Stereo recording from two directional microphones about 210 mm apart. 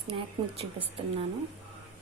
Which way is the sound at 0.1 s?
25° right (ahead or behind).